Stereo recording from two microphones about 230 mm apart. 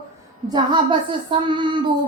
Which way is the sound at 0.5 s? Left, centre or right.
Centre.